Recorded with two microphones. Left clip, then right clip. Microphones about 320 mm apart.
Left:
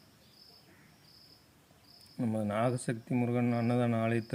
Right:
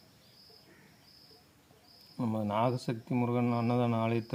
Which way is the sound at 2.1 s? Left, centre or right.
Centre.